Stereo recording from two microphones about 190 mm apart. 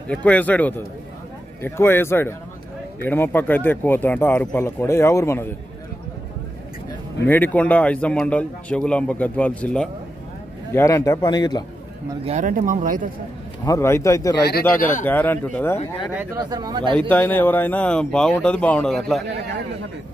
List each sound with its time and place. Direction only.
0.1 s a man's voice: 5° left (ahead or behind)
7.2 s a man's voice: 10° left (ahead or behind)
12.3 s speech: 40° right (ahead or behind)
13.7 s a man's voice: 15° left (ahead or behind)
16.3 s speech: 20° right (ahead or behind)
17.1 s a man's voice: 10° left (ahead or behind)